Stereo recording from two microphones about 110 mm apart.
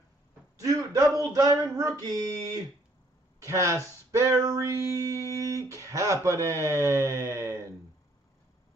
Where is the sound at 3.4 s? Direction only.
30° right (ahead or behind).